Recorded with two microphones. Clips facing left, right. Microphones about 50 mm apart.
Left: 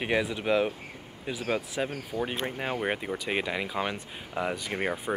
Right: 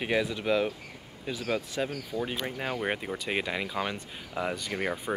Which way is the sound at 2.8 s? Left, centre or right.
Centre.